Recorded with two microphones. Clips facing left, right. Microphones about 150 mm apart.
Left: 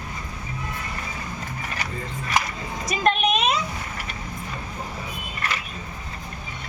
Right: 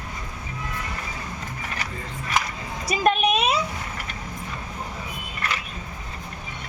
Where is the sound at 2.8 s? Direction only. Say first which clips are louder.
Right 1 dB; 10° right (ahead or behind).